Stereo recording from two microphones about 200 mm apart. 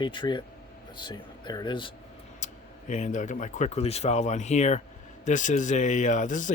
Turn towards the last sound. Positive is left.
turn(degrees=40)  # may be behind; listen again after turning